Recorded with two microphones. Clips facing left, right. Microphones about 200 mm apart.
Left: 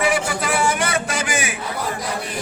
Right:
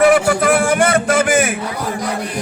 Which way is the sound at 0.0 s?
55° right (ahead or behind).